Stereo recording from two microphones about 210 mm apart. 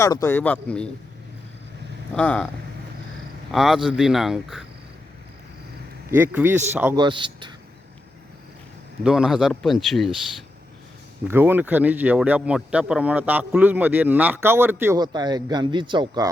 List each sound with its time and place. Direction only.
0.0 s speech: 15° left (ahead or behind)
2.1 s speech: 5° left (ahead or behind)
3.5 s speech: centre (ahead or behind)
6.1 s speech: 10° right (ahead or behind)
6.9 s speech: 20° right (ahead or behind)
9.0 s speech: 5° right (ahead or behind)
11.3 s speech: 10° right (ahead or behind)